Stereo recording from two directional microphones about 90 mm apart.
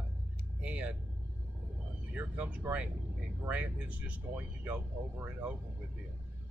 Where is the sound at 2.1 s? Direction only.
15° right (ahead or behind).